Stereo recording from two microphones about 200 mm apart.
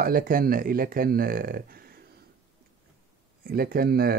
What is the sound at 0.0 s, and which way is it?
Speech, 45° right (ahead or behind).